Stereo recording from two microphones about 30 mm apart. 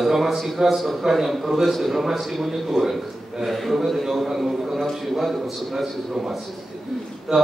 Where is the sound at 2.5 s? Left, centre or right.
Centre.